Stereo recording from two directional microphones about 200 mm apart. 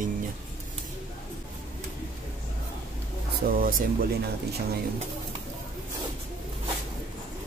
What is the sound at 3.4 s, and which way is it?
Speech, 45° right (ahead or behind).